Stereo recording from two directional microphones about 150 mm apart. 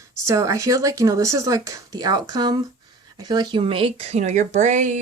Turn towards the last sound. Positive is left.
turn(degrees=-55)  # may be behind; listen again after turning